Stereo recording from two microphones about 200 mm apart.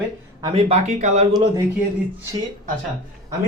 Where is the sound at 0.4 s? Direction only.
30° right (ahead or behind).